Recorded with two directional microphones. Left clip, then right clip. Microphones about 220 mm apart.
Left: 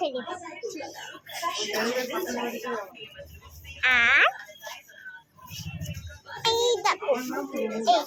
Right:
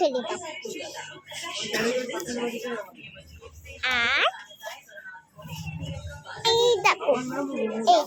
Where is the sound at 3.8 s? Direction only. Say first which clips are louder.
Left 3 dB; centre (ahead or behind).